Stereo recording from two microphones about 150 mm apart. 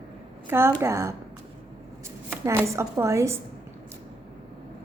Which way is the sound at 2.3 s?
15° right (ahead or behind).